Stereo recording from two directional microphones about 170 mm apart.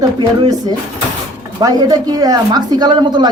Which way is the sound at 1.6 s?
20° right (ahead or behind).